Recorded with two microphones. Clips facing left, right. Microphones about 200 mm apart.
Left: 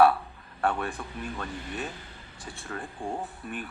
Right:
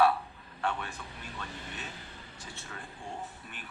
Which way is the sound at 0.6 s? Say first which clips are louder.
Left 6 dB; 50° left (ahead or behind).